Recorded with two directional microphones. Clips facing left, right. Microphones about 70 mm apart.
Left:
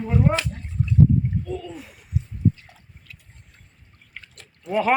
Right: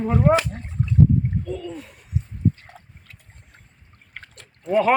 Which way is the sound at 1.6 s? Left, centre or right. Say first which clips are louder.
Right 3 dB; centre.